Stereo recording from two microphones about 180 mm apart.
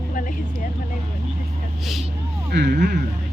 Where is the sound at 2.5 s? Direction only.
70° right (ahead or behind).